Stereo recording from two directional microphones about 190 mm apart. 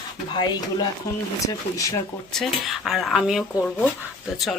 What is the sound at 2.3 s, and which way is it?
Speech, centre (ahead or behind).